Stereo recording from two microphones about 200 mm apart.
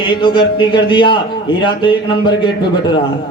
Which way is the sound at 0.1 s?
25° left (ahead or behind).